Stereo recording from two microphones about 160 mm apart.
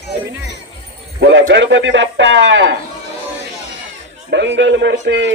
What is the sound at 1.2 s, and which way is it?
Speech, 90° right.